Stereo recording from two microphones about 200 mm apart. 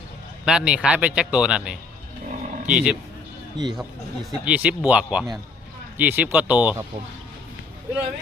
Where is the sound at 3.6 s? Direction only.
20° right (ahead or behind).